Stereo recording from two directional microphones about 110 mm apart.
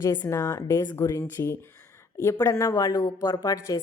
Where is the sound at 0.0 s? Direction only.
25° left (ahead or behind).